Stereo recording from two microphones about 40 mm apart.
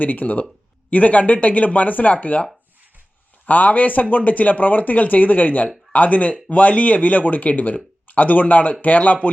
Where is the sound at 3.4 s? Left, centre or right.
Left.